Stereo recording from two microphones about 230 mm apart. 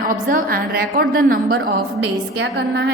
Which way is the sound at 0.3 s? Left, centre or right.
Right.